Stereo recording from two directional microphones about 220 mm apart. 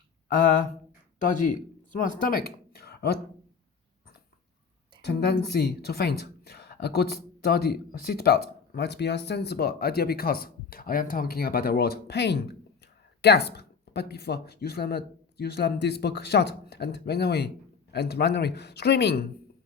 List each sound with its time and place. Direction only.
0.3 s speech: 40° left (ahead or behind)
5.0 s speech: 45° left (ahead or behind)